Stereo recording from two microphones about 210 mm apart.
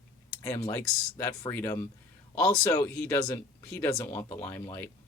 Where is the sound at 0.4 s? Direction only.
15° left (ahead or behind).